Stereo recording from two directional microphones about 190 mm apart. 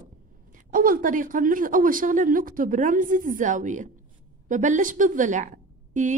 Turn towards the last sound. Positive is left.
turn(degrees=-40)  # may be behind; listen again after turning